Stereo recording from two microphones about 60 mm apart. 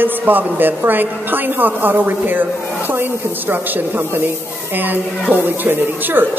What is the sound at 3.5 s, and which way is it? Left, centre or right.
Speech, right.